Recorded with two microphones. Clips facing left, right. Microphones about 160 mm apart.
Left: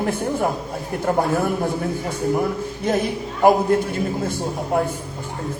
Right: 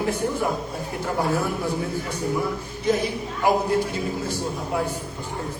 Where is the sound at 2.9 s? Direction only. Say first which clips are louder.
Left 1 dB; 55° left (ahead or behind).